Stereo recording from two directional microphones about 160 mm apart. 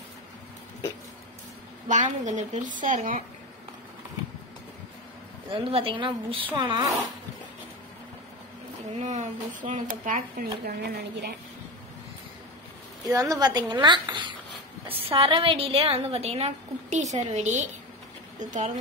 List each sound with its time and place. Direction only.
1.9 s a woman's voice: 50° right (ahead or behind)
5.5 s a woman's voice: 35° right (ahead or behind)
8.9 s speech: 50° right (ahead or behind); by 11.0 s 85° right
13.0 s a woman's voice: 20° right (ahead or behind); by 18.7 s 50° right (ahead or behind)